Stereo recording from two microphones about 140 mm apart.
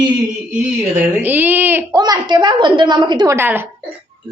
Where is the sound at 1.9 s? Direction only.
30° right (ahead or behind).